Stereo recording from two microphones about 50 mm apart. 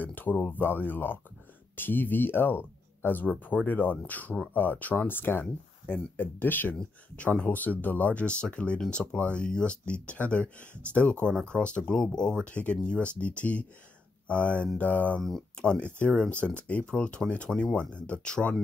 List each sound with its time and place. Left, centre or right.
0.0 s speech: left
7.2 s speech: left